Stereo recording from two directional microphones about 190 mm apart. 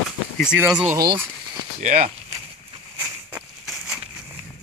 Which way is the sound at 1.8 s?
40° right (ahead or behind).